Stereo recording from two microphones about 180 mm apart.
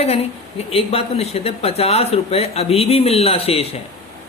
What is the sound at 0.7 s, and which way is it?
Speech, 35° left (ahead or behind).